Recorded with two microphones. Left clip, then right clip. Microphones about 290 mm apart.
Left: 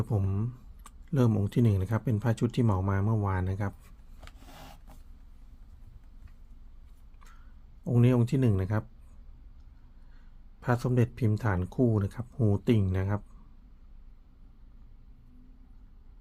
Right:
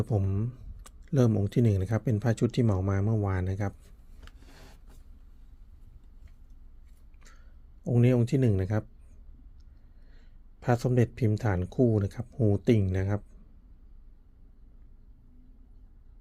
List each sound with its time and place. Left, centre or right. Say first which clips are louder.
0.0 s speech: right 3 dB; centre
7.9 s speech: right 1 dB; centre
10.6 s speech: right 2 dB; centre